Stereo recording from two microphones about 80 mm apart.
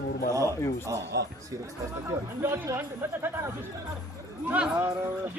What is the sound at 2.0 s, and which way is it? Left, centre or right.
Speech, right.